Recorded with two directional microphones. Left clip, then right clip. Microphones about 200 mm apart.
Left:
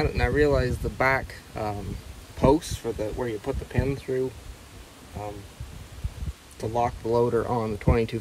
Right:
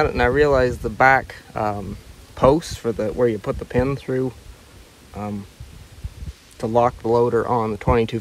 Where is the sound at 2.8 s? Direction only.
50° left (ahead or behind).